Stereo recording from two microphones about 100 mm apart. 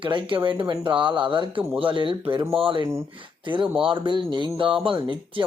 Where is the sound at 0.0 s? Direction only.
55° right (ahead or behind).